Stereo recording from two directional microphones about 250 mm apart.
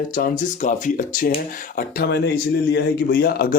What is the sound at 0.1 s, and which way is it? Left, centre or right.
Speech, left.